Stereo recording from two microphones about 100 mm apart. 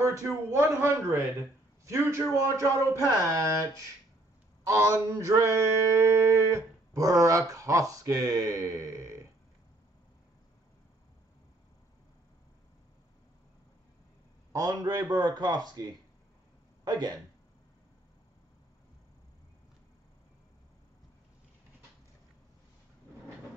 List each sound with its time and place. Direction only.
0.0 s a man's voice: 25° right (ahead or behind)
3.1 s mantra: 30° right (ahead or behind)
14.5 s mantra: 35° right (ahead or behind)